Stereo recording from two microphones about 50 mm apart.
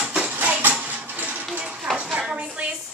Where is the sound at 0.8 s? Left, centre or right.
Right.